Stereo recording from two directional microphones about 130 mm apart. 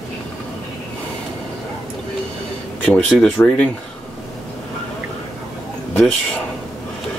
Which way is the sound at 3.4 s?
10° left (ahead or behind).